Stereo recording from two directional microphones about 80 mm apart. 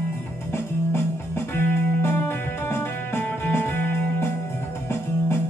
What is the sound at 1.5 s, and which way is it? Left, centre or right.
Music, left.